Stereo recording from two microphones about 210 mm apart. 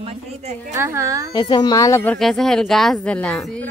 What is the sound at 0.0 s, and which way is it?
Speech, 30° right (ahead or behind).